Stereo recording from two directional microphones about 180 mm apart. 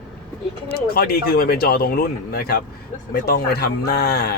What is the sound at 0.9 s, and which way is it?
Speech, 55° left (ahead or behind).